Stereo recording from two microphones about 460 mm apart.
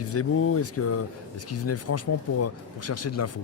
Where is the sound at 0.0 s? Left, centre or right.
Left.